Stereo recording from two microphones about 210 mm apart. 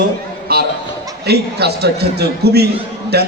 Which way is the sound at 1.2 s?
50° right (ahead or behind).